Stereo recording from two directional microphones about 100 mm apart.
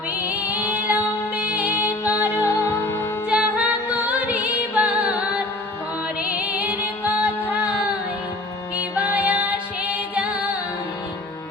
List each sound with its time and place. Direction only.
0.2 s music: 15° right (ahead or behind)
0.9 s music: 20° left (ahead or behind)
1.4 s music: 15° right (ahead or behind)
2.4 s music: 25° left (ahead or behind)
3.2 s music: 10° right (ahead or behind)
8.8 s music: 15° right (ahead or behind)